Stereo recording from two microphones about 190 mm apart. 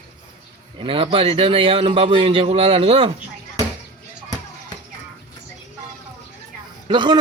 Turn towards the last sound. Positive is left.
turn(degrees=-25)  # may be behind; listen again after turning